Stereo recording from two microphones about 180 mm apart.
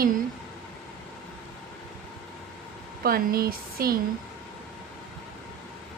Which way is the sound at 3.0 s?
55° right (ahead or behind).